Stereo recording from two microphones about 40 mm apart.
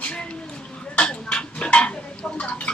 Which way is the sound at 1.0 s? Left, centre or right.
Left.